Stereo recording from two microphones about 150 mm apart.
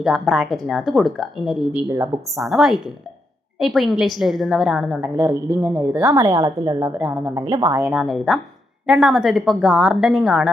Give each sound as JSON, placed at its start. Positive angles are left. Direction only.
{"t": 0.0, "sound": "speech", "side_deg": 0}
{"t": 5.1, "sound": "a woman's voice", "side_deg": -20}
{"t": 7.9, "sound": "speech", "side_deg": -5}